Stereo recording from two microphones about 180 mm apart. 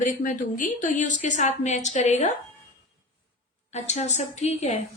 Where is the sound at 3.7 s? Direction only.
40° left (ahead or behind).